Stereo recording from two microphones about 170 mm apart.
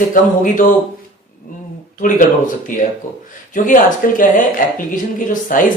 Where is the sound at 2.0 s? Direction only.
50° left (ahead or behind).